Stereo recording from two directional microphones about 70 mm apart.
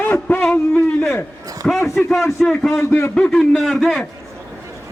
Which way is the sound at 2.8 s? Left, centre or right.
Left.